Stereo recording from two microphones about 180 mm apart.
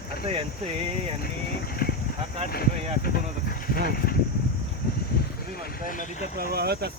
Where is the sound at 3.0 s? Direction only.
55° left (ahead or behind).